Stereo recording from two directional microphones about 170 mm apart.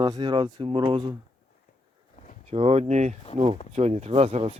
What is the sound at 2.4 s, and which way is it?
Speech, 40° right (ahead or behind).